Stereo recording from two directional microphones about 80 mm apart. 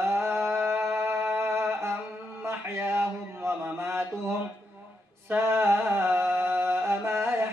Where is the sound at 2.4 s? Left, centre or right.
Right.